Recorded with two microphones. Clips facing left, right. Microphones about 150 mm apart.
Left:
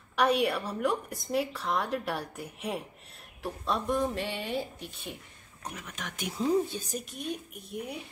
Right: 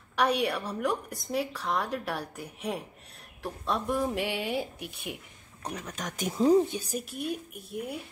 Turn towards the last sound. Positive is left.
turn(degrees=0)  # may be behind; listen again after turning